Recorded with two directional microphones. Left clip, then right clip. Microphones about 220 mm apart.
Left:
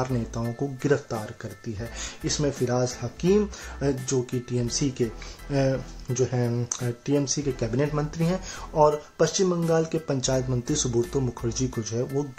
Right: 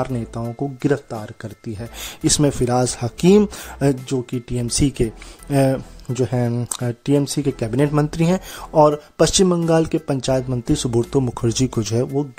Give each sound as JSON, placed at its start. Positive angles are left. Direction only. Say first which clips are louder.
{"t": 0.0, "sound": "speech", "louder": "right 4 dB", "side_deg": -35}